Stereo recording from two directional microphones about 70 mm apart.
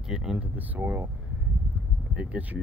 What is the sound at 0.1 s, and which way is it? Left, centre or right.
Speech, centre.